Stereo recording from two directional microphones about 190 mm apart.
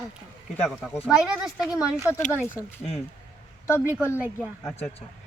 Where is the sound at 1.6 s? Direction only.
15° left (ahead or behind).